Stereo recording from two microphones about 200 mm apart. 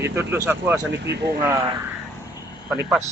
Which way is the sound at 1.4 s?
20° right (ahead or behind).